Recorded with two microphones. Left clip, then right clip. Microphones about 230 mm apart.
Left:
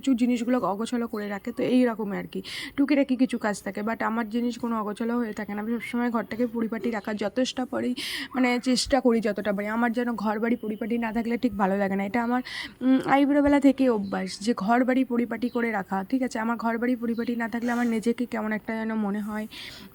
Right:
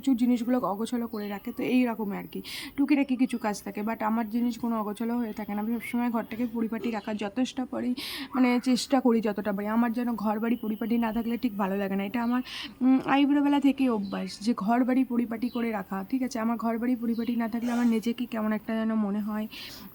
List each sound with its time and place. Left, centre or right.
0.0 s speech: centre
1.5 s speech: centre